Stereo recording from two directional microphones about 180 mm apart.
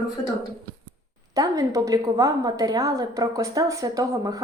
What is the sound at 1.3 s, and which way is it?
A woman's voice, 20° right (ahead or behind).